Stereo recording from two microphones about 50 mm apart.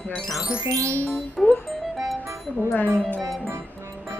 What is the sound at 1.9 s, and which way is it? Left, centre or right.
Music, centre.